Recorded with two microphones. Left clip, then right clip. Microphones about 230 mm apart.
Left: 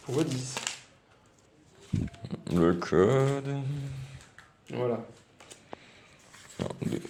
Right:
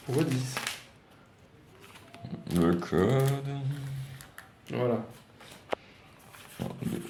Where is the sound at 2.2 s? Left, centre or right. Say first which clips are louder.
Left 2 dB; left.